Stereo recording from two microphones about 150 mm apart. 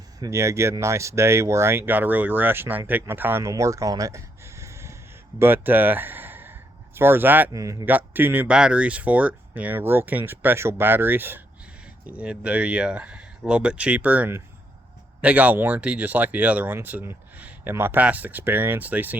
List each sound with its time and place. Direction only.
0.2 s speech: 20° right (ahead or behind)